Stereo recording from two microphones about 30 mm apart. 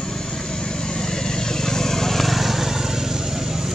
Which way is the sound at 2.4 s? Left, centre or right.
Centre.